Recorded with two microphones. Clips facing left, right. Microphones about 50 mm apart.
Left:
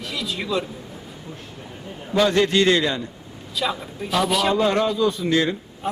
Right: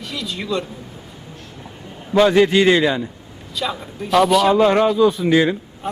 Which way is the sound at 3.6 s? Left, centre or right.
Centre.